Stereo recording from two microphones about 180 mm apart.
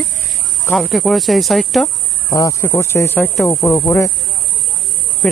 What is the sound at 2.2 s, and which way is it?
Speech, 15° left (ahead or behind).